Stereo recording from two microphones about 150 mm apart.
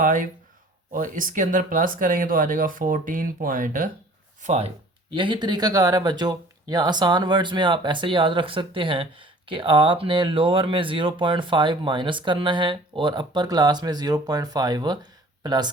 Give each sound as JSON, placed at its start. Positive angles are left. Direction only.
{"t": 0.0, "sound": "speech", "side_deg": -60}
{"t": 4.4, "sound": "speech", "side_deg": -50}
{"t": 5.1, "sound": "speech", "side_deg": -35}